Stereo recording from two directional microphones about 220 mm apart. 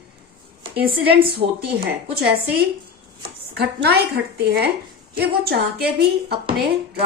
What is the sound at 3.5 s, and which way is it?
A woman's voice, 45° right (ahead or behind).